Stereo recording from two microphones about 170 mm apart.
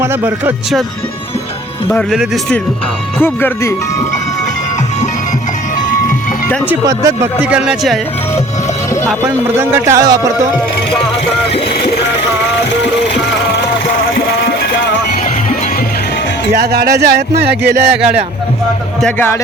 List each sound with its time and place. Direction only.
0.0 s speech: 15° right (ahead or behind)
1.9 s speech: centre (ahead or behind)
3.2 s speech: 15° left (ahead or behind)
6.8 s speech: 20° right (ahead or behind)
7.4 s speech: 5° right (ahead or behind)
9.2 s speech: 15° right (ahead or behind)
16.6 s speech: 70° right (ahead or behind)
19.0 s speech: 15° left (ahead or behind)